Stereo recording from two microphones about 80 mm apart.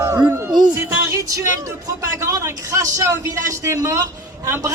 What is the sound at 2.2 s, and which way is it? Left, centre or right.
A man's voice, right.